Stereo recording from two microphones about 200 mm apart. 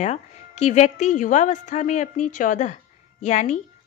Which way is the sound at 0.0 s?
35° left (ahead or behind).